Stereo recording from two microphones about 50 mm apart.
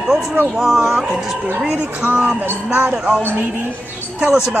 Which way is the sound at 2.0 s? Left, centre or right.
Right.